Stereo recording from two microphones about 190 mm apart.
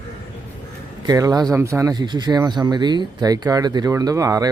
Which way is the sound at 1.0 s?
20° right (ahead or behind).